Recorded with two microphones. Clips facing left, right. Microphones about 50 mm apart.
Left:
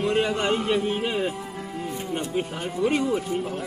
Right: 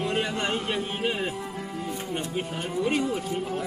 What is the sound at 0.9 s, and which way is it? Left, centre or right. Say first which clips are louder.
Speech: left 2 dB; centre.